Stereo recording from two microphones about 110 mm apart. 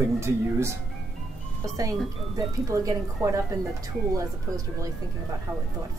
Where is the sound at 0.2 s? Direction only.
25° right (ahead or behind).